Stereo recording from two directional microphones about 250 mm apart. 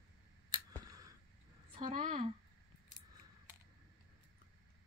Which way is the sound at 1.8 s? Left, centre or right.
Right.